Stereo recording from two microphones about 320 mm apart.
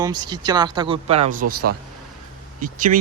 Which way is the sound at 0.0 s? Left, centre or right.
Centre.